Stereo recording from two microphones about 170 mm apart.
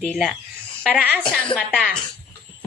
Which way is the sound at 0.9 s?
10° right (ahead or behind).